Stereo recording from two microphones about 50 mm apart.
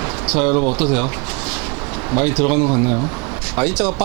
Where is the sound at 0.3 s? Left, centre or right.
Centre.